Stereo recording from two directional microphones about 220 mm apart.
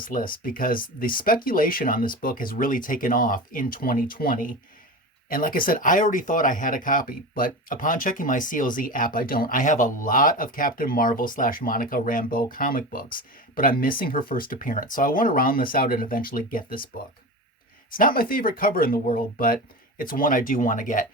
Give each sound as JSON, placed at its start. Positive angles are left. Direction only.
{"t": 0.0, "sound": "speech", "side_deg": 40}
{"t": 17.9, "sound": "speech", "side_deg": 40}